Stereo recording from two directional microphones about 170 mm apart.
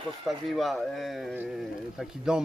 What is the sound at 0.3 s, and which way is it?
Speech, centre (ahead or behind).